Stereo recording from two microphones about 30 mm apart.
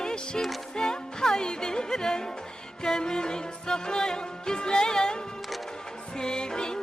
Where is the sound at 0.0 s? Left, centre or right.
Left.